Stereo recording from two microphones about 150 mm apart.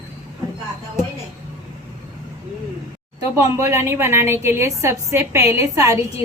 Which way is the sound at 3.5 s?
20° right (ahead or behind).